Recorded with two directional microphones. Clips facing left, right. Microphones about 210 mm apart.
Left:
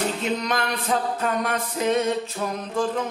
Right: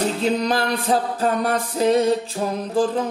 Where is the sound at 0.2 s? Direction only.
30° right (ahead or behind).